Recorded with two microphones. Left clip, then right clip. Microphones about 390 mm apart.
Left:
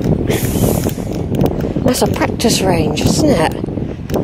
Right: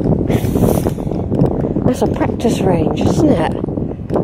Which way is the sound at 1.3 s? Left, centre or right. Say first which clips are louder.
Even; centre.